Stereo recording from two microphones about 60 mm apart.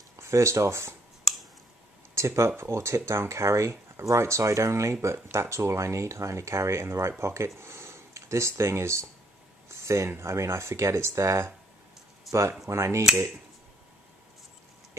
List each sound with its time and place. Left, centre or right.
0.2 s speech: right
2.1 s speech: right